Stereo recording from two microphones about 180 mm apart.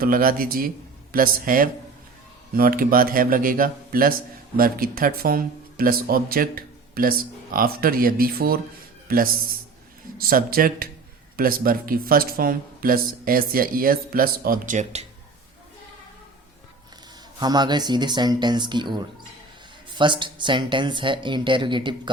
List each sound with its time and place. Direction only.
0.0 s a man's voice: 50° right (ahead or behind)
17.4 s speech: 25° right (ahead or behind)